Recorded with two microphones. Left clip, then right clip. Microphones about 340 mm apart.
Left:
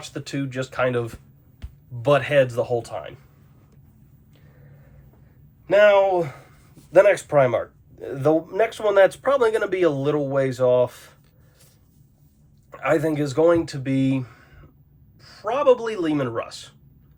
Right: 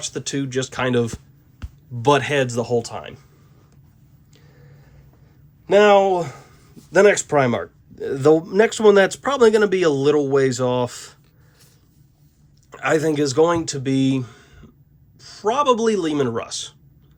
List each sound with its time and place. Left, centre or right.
0.0 s speech: right
5.6 s speech: right
12.7 s speech: right